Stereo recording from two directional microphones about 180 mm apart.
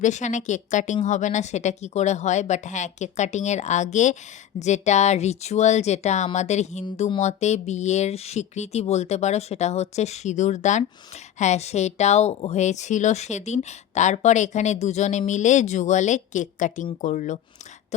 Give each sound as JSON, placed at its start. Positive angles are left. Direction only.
{"t": 0.0, "sound": "a woman's voice", "side_deg": 40}